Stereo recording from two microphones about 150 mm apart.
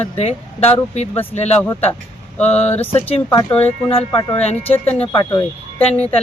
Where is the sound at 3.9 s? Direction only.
35° left (ahead or behind).